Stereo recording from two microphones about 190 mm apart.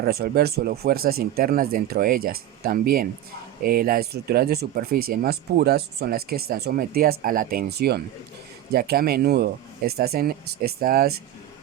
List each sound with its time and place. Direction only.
0.0 s speech: 55° right (ahead or behind)